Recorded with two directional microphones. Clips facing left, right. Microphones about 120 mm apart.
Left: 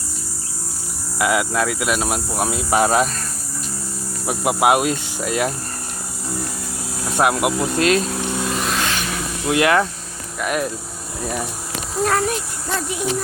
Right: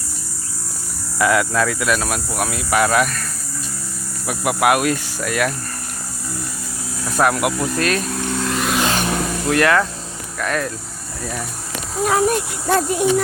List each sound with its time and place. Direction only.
1.2 s speech: 10° left (ahead or behind); by 3.2 s 30° left (ahead or behind)
4.3 s speech: 25° left (ahead or behind)
7.0 s speech: 20° left (ahead or behind)
8.4 s vehicle: centre (ahead or behind)
8.9 s a sound: 40° right (ahead or behind)
9.5 s speech: 20° left (ahead or behind)
11.9 s speech: 10° right (ahead or behind)
12.3 s speech: 50° right (ahead or behind)